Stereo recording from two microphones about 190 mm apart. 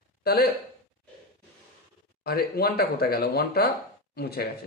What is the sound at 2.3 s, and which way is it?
Speech, 55° left (ahead or behind).